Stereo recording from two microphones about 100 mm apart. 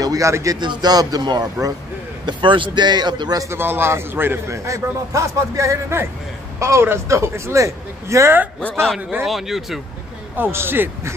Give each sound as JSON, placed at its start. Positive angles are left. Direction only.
{"t": 0.0, "sound": "speech", "side_deg": -35}
{"t": 0.6, "sound": "a man's voice", "side_deg": -45}
{"t": 2.2, "sound": "a man's voice", "side_deg": -55}
{"t": 3.4, "sound": "a man's voice", "side_deg": -20}
{"t": 9.2, "sound": "speech", "side_deg": 0}
{"t": 10.3, "sound": "a man's voice", "side_deg": -20}